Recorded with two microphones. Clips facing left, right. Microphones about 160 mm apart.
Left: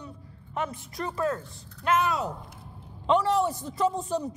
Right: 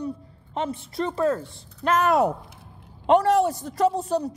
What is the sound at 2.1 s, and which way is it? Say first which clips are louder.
Speech: right 9 dB; 60° right (ahead or behind).